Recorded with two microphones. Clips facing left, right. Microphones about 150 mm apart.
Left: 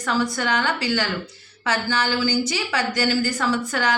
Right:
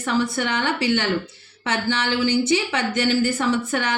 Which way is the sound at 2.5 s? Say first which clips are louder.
Right 3 dB; 25° right (ahead or behind).